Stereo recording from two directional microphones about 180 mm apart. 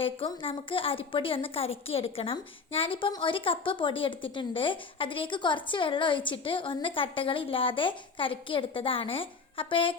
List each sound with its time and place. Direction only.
0.0 s a woman's voice: 30° left (ahead or behind)